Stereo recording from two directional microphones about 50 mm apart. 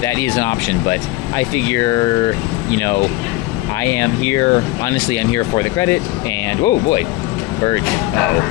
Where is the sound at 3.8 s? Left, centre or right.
Left.